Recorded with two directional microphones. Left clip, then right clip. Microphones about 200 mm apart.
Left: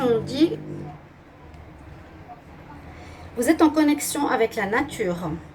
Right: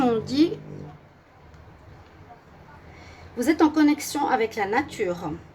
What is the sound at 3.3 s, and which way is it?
A woman's voice, 45° right (ahead or behind).